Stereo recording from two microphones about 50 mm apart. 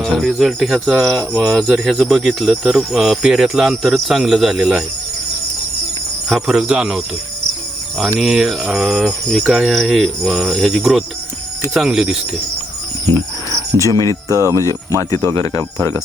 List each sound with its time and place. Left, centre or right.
0.0 s speech: centre
6.2 s speech: centre
13.7 s speech: left